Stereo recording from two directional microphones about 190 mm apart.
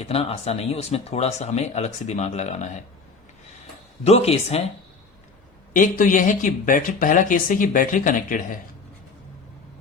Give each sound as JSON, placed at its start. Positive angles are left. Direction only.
{"t": 0.0, "sound": "speech", "side_deg": 30}
{"t": 4.0, "sound": "speech", "side_deg": 35}
{"t": 5.7, "sound": "speech", "side_deg": 45}